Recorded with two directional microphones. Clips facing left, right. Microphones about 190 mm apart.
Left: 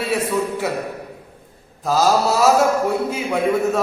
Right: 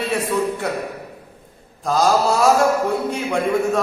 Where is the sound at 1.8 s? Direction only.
5° left (ahead or behind).